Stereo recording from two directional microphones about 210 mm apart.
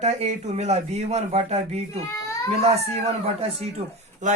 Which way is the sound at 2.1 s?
15° left (ahead or behind).